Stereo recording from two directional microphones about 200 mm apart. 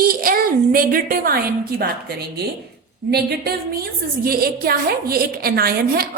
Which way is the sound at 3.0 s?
55° right (ahead or behind).